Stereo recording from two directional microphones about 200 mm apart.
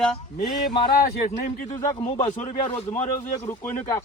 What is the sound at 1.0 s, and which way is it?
A man's voice, 45° left (ahead or behind).